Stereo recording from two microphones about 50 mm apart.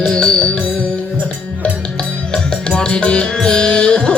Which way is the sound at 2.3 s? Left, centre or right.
Centre.